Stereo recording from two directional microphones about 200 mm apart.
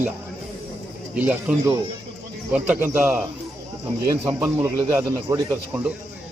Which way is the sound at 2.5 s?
5° right (ahead or behind).